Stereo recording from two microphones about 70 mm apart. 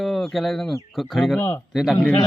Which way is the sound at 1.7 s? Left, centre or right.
Centre.